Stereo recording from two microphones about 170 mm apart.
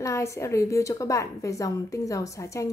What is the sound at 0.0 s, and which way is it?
A woman's voice, 20° left (ahead or behind).